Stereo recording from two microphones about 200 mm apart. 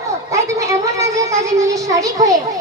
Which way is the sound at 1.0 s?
15° right (ahead or behind).